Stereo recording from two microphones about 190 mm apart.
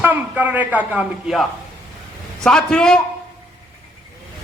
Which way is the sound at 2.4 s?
5° left (ahead or behind).